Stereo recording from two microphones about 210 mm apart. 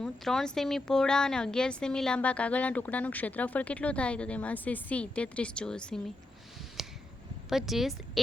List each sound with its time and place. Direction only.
0.0 s a woman's voice: centre (ahead or behind)
6.8 s a sound: centre (ahead or behind)
7.5 s a woman's voice: centre (ahead or behind)